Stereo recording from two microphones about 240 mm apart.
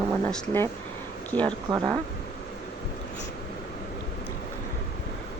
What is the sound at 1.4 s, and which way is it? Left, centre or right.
Speech, centre.